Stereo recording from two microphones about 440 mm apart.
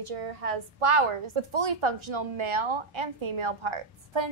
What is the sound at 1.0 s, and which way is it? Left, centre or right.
A child's voice, right.